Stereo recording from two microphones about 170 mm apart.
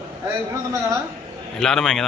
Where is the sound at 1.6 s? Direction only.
5° left (ahead or behind).